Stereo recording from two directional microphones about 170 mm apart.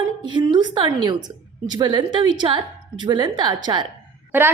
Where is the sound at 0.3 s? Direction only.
25° right (ahead or behind).